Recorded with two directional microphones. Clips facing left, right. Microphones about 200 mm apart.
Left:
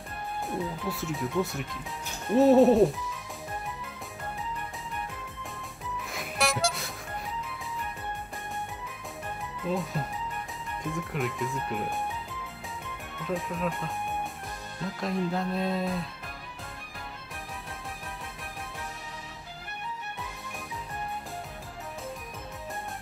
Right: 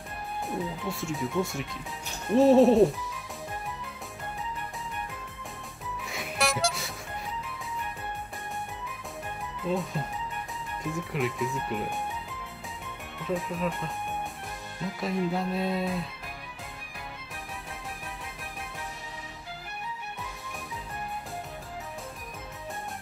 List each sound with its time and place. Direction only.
0.5 s speech: centre (ahead or behind)
6.0 s music: centre (ahead or behind)
9.7 s speech: centre (ahead or behind)
13.3 s speech: centre (ahead or behind)
15.0 s speech: 5° right (ahead or behind)